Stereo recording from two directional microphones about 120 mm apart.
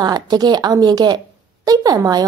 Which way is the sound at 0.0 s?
35° right (ahead or behind).